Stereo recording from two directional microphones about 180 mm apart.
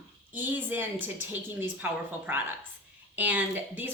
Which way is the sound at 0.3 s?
10° right (ahead or behind).